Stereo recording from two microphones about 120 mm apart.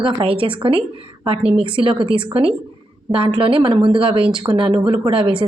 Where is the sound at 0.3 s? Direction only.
45° right (ahead or behind).